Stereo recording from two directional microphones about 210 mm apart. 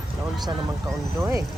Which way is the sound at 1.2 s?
15° right (ahead or behind).